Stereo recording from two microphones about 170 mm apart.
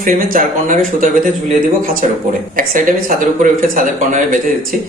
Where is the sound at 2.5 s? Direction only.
55° right (ahead or behind).